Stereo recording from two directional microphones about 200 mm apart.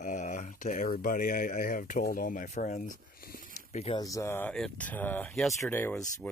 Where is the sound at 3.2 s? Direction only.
50° left (ahead or behind).